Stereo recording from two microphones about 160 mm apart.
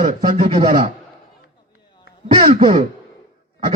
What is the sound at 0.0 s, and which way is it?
Speech, 55° right (ahead or behind).